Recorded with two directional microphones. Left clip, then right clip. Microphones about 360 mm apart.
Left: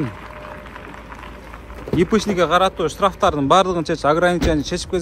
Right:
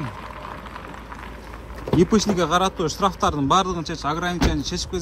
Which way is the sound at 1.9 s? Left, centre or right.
Centre.